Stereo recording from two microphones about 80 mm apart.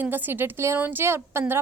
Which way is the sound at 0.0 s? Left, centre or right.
Right.